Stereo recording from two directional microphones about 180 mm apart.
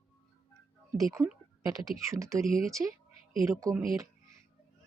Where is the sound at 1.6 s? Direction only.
20° right (ahead or behind).